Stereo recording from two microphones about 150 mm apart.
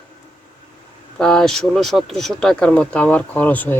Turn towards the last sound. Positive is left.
turn(degrees=10)  # may be behind; listen again after turning